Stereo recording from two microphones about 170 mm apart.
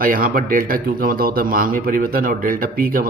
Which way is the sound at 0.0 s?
55° right (ahead or behind).